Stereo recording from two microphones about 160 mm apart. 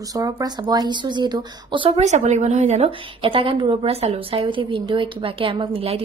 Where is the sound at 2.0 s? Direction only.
45° right (ahead or behind).